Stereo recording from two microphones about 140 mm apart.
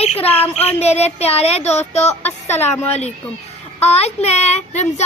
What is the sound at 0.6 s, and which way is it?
Child singing, 45° left (ahead or behind).